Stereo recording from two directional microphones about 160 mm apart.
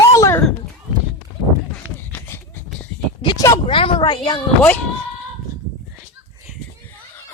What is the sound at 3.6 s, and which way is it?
Speech, 35° left (ahead or behind).